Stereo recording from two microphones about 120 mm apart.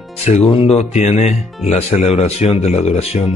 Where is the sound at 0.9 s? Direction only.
70° left (ahead or behind).